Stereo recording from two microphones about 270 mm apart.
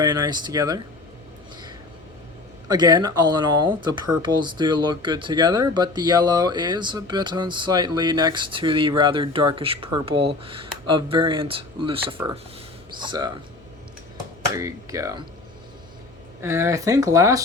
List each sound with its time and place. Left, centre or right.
0.0 s speech: centre
2.6 s speech: centre
14.5 s speech: centre
16.4 s speech: centre